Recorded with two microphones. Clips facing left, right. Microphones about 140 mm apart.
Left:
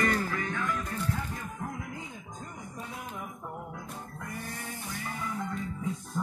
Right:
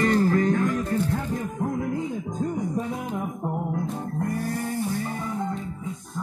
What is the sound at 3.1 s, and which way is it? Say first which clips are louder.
Music: right 11 dB; 50° right (ahead or behind).